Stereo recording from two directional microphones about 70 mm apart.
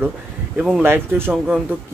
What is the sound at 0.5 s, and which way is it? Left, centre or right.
Speech, centre.